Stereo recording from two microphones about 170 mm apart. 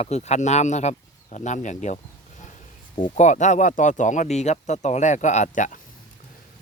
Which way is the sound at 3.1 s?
45° left (ahead or behind).